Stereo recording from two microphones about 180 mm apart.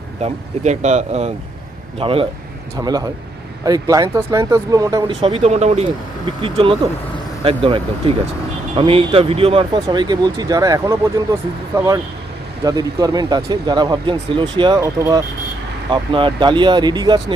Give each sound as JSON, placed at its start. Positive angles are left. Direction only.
{"t": 0.2, "sound": "speech", "side_deg": -40}
{"t": 2.7, "sound": "speech", "side_deg": -20}
{"t": 5.2, "sound": "speech", "side_deg": -35}